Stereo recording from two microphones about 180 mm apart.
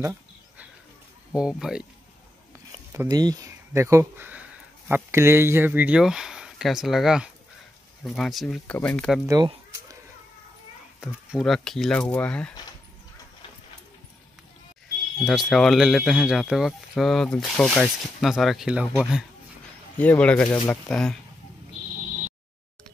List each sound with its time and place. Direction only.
1.3 s speech: 5° right (ahead or behind)
2.9 s speech: 20° right (ahead or behind); by 9.2 s 5° left (ahead or behind)
11.0 s speech: 5° right (ahead or behind)
15.2 s speech: centre (ahead or behind)
20.0 s speech: 5° left (ahead or behind)
20.5 s speech: 20° left (ahead or behind)
20.9 s speech: 5° left (ahead or behind)